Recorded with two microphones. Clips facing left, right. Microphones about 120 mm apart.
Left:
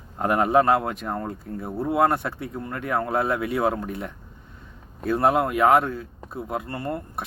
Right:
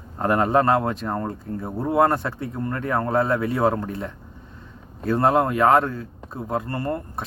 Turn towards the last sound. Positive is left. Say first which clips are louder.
# right 3 dB
turn(degrees=10)  # may be behind; listen again after turning